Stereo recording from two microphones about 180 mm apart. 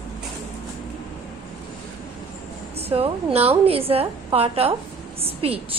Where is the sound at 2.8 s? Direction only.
30° right (ahead or behind).